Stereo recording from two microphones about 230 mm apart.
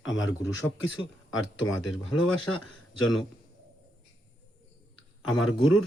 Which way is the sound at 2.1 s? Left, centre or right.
Left.